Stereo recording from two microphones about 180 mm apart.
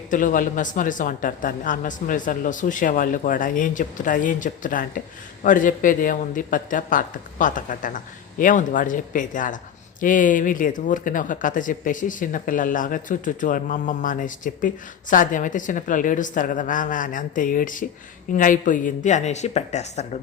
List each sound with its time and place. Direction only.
0.1 s speech: 45° left (ahead or behind)